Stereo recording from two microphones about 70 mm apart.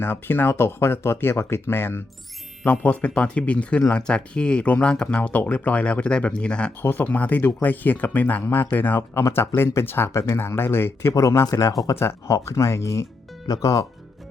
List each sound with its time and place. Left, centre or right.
0.0 s speech: left
2.6 s speech: centre
6.8 s speech: left
9.0 s speech: left
11.1 s speech: left
11.9 s speech: left
13.5 s speech: left